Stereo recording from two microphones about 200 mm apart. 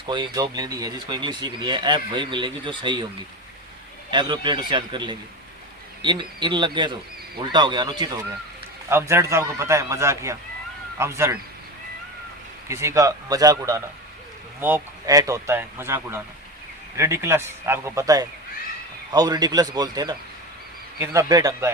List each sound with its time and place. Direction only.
0.0 s speech: 25° right (ahead or behind)
4.1 s speech: 25° right (ahead or behind)
12.6 s speech: 15° right (ahead or behind)